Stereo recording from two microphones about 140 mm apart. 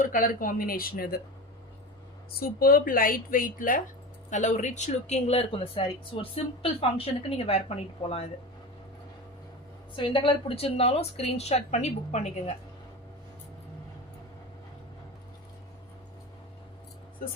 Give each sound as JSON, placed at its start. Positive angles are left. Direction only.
{"t": 0.0, "sound": "speech", "side_deg": 80}
{"t": 2.4, "sound": "speech", "side_deg": 90}
{"t": 4.3, "sound": "speech", "side_deg": 60}
{"t": 9.9, "sound": "speech", "side_deg": 35}